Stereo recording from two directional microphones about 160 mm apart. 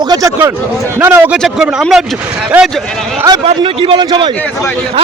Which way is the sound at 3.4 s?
35° right (ahead or behind).